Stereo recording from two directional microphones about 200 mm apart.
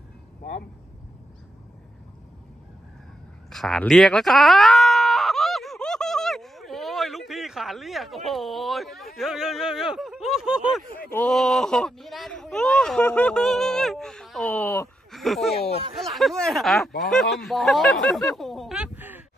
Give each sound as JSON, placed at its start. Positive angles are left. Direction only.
{"t": 0.4, "sound": "vehicle", "side_deg": 45}
{"t": 3.5, "sound": "groan", "side_deg": 0}
{"t": 11.1, "sound": "speech", "side_deg": 5}
{"t": 15.0, "sound": "a sound", "side_deg": 0}
{"t": 16.0, "sound": "speech", "side_deg": 0}